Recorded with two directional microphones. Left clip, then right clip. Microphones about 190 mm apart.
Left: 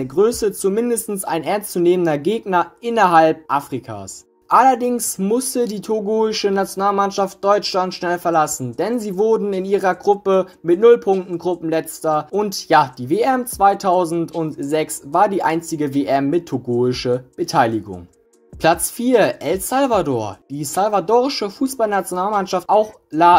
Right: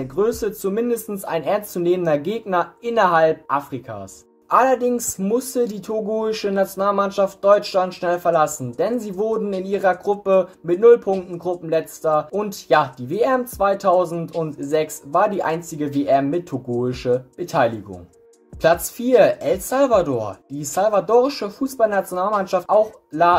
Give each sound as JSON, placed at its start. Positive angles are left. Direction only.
{"t": 0.0, "sound": "speech", "side_deg": 25}